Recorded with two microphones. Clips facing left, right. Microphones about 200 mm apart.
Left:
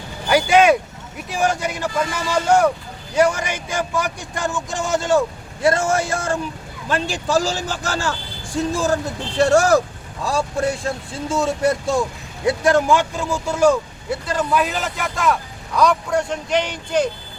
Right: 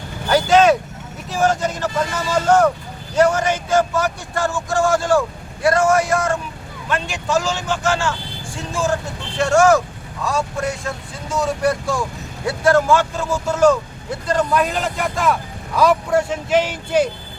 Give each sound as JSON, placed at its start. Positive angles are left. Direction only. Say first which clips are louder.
{"t": 0.3, "sound": "speech", "louder": "right 1 dB", "side_deg": 10}